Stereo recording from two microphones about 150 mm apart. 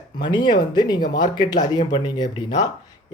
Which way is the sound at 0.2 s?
30° left (ahead or behind).